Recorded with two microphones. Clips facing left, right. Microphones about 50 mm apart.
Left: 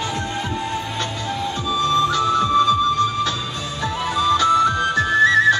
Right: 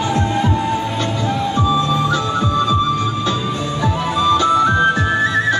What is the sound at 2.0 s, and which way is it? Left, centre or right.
Music, right.